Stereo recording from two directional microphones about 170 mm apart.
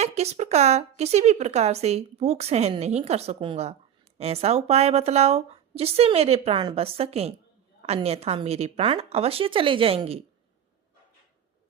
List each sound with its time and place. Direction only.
0.0 s speech: 40° right (ahead or behind)